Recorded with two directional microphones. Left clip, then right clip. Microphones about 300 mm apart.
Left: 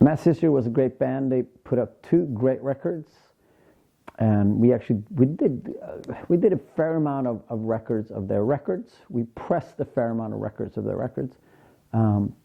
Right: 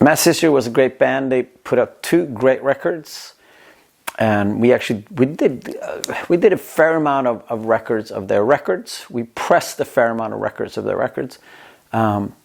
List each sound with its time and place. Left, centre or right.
0.0 s speech: centre